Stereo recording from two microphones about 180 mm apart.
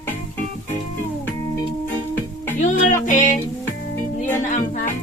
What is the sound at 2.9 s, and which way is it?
Music, 45° left (ahead or behind).